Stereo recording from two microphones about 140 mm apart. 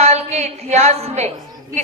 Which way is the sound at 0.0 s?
50° right (ahead or behind).